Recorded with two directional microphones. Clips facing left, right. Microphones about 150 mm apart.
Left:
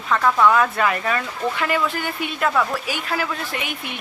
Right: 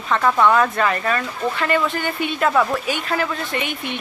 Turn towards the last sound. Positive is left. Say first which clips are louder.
# right 4 dB
turn(degrees=5)  # may be behind; listen again after turning